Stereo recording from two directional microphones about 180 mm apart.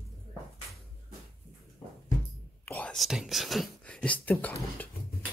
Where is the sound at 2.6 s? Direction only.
10° left (ahead or behind).